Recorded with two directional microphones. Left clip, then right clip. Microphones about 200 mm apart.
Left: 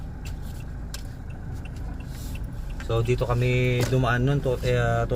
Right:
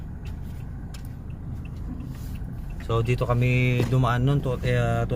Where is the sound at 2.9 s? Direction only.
10° right (ahead or behind).